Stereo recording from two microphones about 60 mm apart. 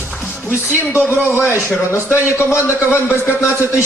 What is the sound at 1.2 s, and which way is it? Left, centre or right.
Speech, right.